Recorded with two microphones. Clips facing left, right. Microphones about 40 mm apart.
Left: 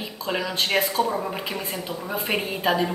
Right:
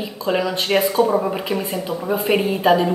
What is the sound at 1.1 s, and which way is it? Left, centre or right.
Speech, centre.